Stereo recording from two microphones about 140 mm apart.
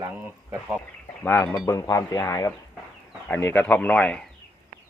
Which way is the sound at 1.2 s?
15° left (ahead or behind).